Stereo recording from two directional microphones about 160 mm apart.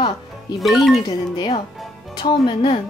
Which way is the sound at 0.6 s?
Centre (ahead or behind).